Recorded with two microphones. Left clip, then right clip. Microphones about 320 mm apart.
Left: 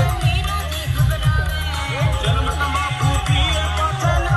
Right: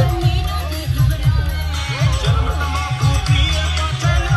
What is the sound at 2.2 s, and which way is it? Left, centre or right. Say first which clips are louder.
Music: left 2 dB; left.